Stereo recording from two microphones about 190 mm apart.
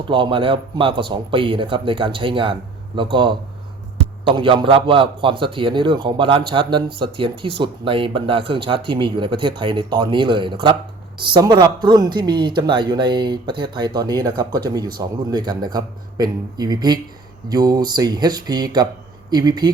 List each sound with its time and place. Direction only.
0.1 s a man's voice: 25° right (ahead or behind)